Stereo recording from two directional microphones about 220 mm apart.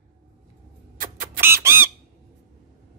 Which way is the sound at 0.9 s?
40° right (ahead or behind).